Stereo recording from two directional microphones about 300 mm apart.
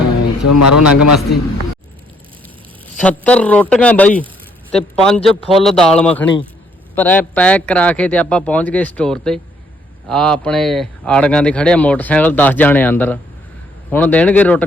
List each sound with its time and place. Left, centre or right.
0.4 s a man's voice: left
3.0 s a man's voice: centre